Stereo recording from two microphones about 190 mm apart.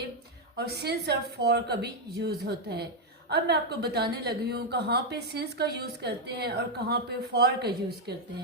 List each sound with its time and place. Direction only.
0.5 s a woman's voice: 60° right (ahead or behind)